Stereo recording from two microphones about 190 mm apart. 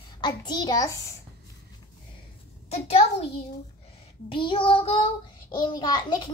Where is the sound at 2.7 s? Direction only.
35° left (ahead or behind).